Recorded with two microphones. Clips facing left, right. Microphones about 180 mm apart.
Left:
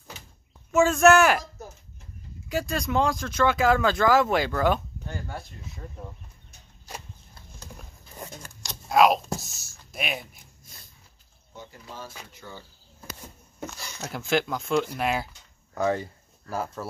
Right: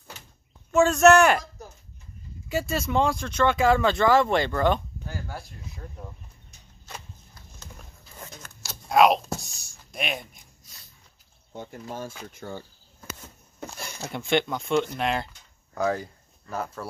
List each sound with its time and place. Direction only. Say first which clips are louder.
0.7 s speech: right 1 dB; centre (ahead or behind)
2.7 s speech: right 1 dB; centre (ahead or behind)
8.6 s a sound: right 1 dB; centre (ahead or behind)
10.6 s a sound: left 3 dB; 50° left (ahead or behind)
11.5 s speech: right 6 dB; 55° right (ahead or behind)
14.1 s speech: right 1 dB; centre (ahead or behind)